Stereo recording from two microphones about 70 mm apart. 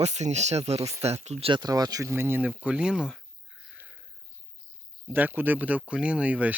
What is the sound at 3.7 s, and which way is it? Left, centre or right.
Sniff, right.